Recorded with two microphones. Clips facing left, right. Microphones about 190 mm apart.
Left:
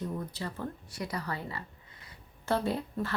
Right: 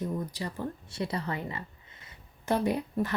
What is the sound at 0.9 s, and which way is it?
A woman's voice, 25° right (ahead or behind).